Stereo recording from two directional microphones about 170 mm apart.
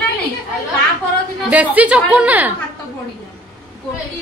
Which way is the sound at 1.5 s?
10° right (ahead or behind).